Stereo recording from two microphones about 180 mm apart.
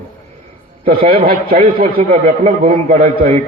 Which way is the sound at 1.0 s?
30° right (ahead or behind).